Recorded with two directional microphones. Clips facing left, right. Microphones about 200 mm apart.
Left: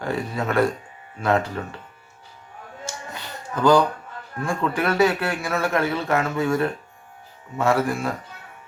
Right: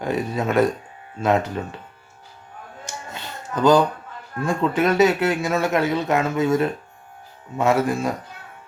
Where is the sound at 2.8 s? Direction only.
20° right (ahead or behind).